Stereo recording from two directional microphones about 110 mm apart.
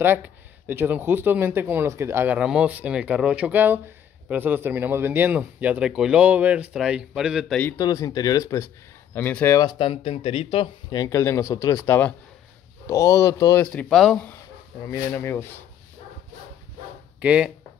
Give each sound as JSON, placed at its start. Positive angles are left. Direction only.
{"t": 0.7, "sound": "speech", "side_deg": -20}
{"t": 2.3, "sound": "speech", "side_deg": -10}
{"t": 7.7, "sound": "speech", "side_deg": 35}
{"t": 9.1, "sound": "speech", "side_deg": 15}
{"t": 9.6, "sound": "speech", "side_deg": 45}
{"t": 11.1, "sound": "speech", "side_deg": 25}
{"t": 13.7, "sound": "speech", "side_deg": 5}
{"t": 14.9, "sound": "speech", "side_deg": 20}
{"t": 17.2, "sound": "speech", "side_deg": -10}